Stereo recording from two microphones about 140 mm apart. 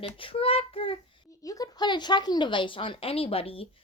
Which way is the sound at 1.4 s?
25° left (ahead or behind).